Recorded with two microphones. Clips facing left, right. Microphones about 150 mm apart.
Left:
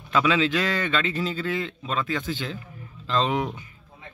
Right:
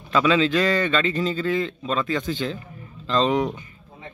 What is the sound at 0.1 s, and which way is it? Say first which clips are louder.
A man's voice: right 3 dB; 10° left (ahead or behind).